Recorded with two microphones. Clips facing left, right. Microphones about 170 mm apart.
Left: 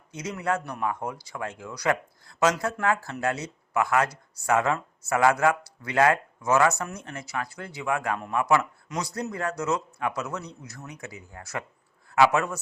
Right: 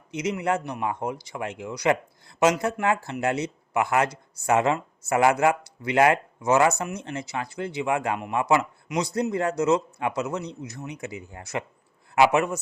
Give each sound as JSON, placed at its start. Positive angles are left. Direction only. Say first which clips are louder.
{"t": 0.1, "sound": "speech", "louder": "right 3 dB", "side_deg": -20}